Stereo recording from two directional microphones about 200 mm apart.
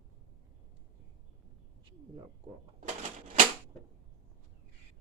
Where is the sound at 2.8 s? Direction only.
35° right (ahead or behind).